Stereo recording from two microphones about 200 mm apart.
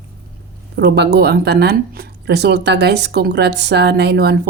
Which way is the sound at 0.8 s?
55° right (ahead or behind).